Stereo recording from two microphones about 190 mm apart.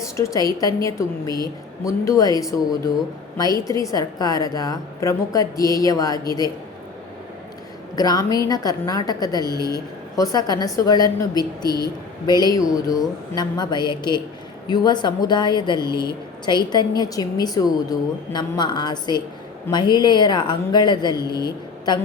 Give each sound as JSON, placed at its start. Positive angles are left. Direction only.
{"t": 0.2, "sound": "a woman's voice", "side_deg": 20}
{"t": 7.9, "sound": "a woman's voice", "side_deg": 20}
{"t": 9.6, "sound": "speech", "side_deg": -20}
{"t": 10.2, "sound": "a woman's voice", "side_deg": 20}